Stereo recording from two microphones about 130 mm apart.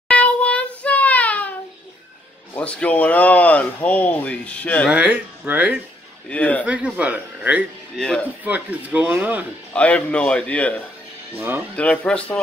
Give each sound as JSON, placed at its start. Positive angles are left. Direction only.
{"t": 0.1, "sound": "child singing", "side_deg": 10}
{"t": 2.5, "sound": "speech", "side_deg": 10}
{"t": 4.8, "sound": "speech", "side_deg": -10}
{"t": 6.2, "sound": "speech", "side_deg": 10}
{"t": 6.6, "sound": "speech", "side_deg": -10}
{"t": 8.0, "sound": "speech", "side_deg": 5}
{"t": 8.5, "sound": "speech", "side_deg": -10}
{"t": 9.8, "sound": "speech", "side_deg": 10}
{"t": 11.3, "sound": "speech", "side_deg": -15}
{"t": 11.7, "sound": "speech", "side_deg": 10}